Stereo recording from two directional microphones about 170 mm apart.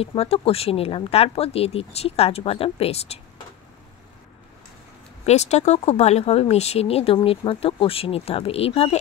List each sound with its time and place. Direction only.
0.0 s speech: 35° left (ahead or behind)
5.2 s speech: 40° left (ahead or behind)